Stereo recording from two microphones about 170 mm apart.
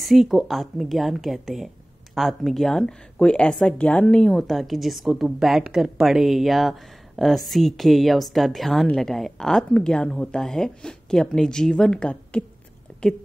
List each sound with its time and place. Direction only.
0.0 s a woman's voice: centre (ahead or behind)